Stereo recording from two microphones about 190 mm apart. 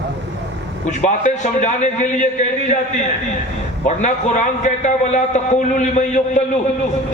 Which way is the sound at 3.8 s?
40° left (ahead or behind).